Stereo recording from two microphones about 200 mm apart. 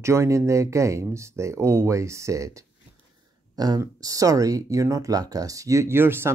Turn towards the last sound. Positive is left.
turn(degrees=-10)  # may be behind; listen again after turning